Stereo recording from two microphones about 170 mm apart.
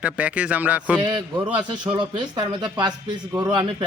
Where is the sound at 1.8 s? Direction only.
25° right (ahead or behind).